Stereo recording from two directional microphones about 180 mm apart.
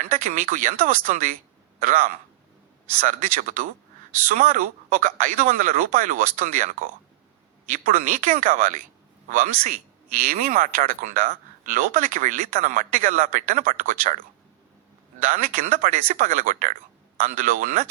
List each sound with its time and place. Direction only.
0.0 s speech: 45° right (ahead or behind)
15.2 s speech: 50° right (ahead or behind)